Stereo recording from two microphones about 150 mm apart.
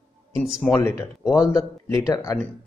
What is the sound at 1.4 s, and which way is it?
A man's voice, 25° left (ahead or behind).